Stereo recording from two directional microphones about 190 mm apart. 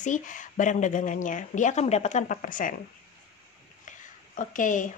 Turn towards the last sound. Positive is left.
turn(degrees=45)  # may be behind; listen again after turning